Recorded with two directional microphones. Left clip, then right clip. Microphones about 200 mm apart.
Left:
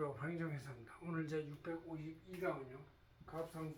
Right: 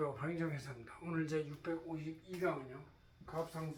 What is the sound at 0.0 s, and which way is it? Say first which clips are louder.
Speech: right 4 dB; 10° left (ahead or behind).